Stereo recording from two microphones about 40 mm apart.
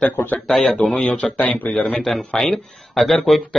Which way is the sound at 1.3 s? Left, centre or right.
Left.